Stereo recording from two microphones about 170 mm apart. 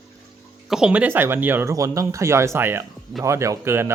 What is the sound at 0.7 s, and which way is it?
Speech, 5° right (ahead or behind).